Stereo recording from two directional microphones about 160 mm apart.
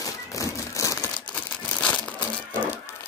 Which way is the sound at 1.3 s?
10° left (ahead or behind).